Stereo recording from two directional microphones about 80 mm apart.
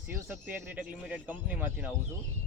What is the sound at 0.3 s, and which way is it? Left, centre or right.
Speech, centre.